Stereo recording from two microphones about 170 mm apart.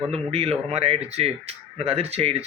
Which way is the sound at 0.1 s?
35° right (ahead or behind).